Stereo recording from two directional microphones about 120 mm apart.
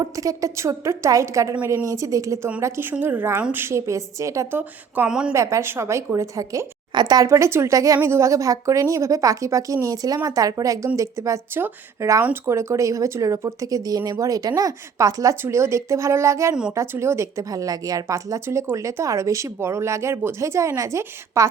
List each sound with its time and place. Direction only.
0.0 s speech: 30° right (ahead or behind); by 5.3 s 10° right (ahead or behind)
5.3 s speech: 25° right (ahead or behind)